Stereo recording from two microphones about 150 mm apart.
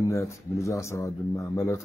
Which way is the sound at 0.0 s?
20° left (ahead or behind).